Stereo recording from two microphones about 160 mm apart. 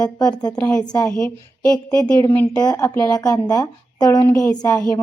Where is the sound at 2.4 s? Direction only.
25° left (ahead or behind).